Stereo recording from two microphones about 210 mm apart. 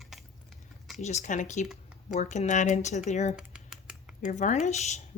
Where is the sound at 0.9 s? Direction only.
35° left (ahead or behind).